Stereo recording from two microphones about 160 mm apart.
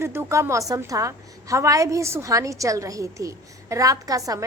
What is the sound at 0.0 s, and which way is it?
A woman's voice, 15° right (ahead or behind).